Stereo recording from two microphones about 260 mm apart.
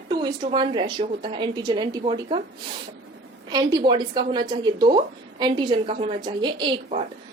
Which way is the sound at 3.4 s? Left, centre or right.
Centre.